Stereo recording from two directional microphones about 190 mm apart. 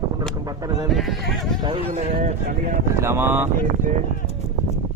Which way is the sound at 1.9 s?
40° right (ahead or behind).